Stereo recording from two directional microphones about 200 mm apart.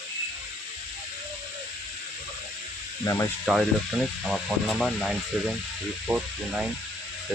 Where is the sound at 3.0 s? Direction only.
15° left (ahead or behind).